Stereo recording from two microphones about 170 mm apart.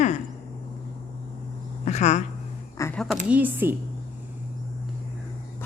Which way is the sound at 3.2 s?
10° right (ahead or behind).